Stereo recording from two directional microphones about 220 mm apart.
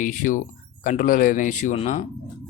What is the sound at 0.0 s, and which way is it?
Speech, 35° left (ahead or behind).